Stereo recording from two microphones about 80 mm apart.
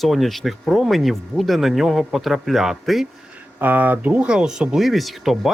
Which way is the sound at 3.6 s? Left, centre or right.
Right.